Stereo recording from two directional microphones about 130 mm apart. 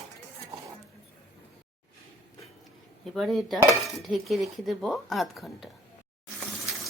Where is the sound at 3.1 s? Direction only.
Centre (ahead or behind).